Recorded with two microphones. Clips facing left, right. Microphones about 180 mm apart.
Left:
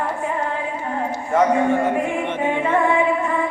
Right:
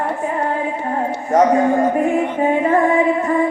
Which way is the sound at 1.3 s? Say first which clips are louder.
Right 4 dB; 40° right (ahead or behind).